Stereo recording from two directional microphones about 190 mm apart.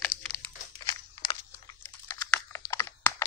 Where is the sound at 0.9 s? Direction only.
20° left (ahead or behind).